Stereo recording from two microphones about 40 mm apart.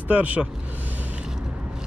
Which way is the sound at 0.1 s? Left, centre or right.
Right.